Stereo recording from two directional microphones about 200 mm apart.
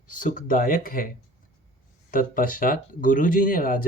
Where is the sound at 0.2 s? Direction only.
40° left (ahead or behind).